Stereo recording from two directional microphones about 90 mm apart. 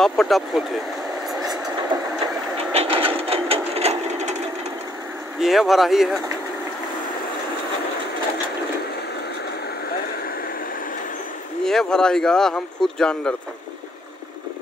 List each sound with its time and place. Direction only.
0.0 s speech: centre (ahead or behind)
1.9 s engine: 55° right (ahead or behind)
2.8 s a sound: 90° right
5.4 s speech: 5° right (ahead or behind)
11.6 s speech: 5° left (ahead or behind)